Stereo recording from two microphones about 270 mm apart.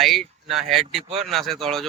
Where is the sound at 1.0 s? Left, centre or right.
Right.